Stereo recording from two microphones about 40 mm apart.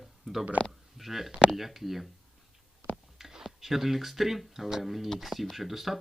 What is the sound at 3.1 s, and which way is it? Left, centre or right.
Speech, centre.